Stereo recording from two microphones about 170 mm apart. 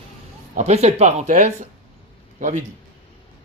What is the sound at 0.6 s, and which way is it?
A man's voice, 40° right (ahead or behind).